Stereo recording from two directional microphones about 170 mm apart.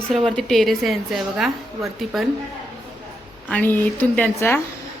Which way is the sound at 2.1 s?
Centre (ahead or behind).